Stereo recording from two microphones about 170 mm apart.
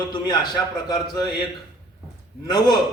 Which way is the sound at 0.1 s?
25° left (ahead or behind).